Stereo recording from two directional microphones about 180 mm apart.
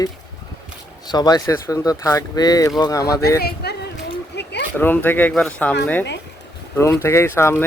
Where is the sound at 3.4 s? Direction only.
65° left (ahead or behind).